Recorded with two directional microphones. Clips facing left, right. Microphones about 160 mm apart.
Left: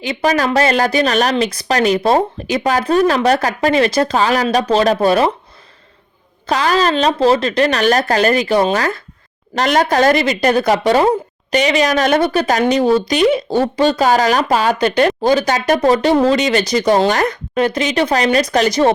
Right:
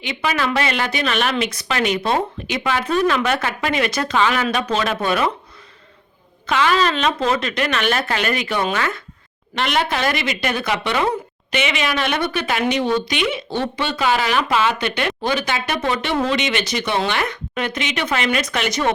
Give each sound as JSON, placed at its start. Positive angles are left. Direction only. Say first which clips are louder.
{"t": 0.0, "sound": "a woman's voice", "louder": "left 6 dB", "side_deg": 40}
{"t": 6.5, "sound": "a woman's voice", "louder": "left 3 dB", "side_deg": 35}